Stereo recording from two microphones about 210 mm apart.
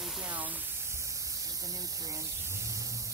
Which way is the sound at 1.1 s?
15° right (ahead or behind).